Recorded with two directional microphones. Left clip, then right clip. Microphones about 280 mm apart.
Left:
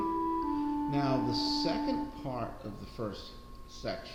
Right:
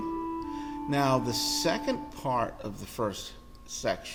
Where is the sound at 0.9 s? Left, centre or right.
Right.